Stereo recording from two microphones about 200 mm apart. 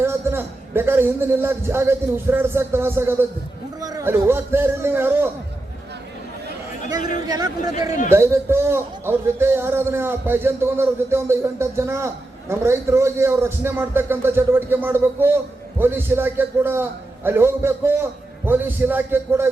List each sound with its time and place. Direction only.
0.0 s a man's voice: 10° right (ahead or behind)
7.3 s a man's voice: 20° right (ahead or behind)